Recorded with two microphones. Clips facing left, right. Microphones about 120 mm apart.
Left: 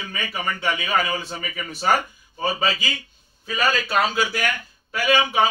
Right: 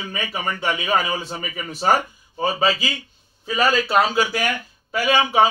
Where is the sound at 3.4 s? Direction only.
25° right (ahead or behind).